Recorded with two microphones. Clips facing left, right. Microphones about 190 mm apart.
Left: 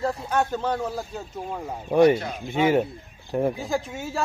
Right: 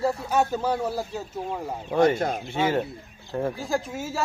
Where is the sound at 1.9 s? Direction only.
15° left (ahead or behind).